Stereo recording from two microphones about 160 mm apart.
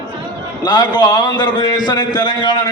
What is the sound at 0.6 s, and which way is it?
A man's voice, 25° left (ahead or behind).